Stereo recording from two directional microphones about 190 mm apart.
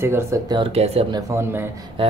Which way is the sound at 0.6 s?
30° right (ahead or behind).